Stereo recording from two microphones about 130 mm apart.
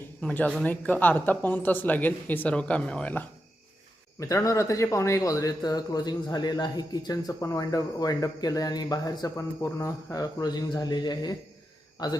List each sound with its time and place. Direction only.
0.2 s speech: 10° left (ahead or behind)
4.2 s speech: 25° left (ahead or behind)